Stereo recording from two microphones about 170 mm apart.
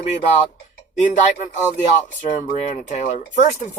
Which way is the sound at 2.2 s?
45° left (ahead or behind).